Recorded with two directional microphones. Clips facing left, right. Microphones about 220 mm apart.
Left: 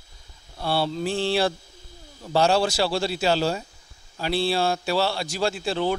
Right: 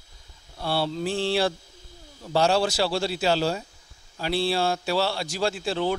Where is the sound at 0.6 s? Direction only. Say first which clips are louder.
Left 2 dB; 35° left (ahead or behind).